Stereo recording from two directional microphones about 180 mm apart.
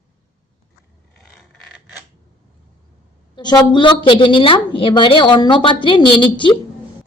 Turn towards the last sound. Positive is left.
turn(degrees=25)  # may be behind; listen again after turning